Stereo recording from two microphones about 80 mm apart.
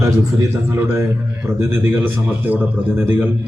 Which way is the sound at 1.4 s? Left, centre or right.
Right.